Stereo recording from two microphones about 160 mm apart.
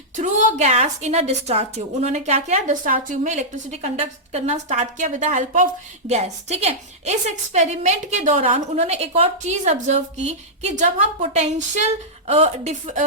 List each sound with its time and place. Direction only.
0.2 s a woman's voice: 45° right (ahead or behind)